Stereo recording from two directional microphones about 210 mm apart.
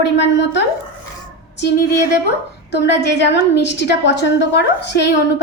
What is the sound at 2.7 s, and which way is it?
A woman's voice, 55° left (ahead or behind).